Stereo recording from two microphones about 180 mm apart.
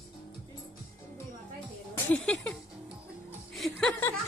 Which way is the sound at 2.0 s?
5° left (ahead or behind).